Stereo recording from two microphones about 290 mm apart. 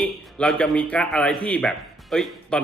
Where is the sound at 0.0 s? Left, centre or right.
Centre.